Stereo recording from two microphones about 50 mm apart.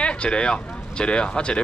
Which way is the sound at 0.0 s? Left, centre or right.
Left.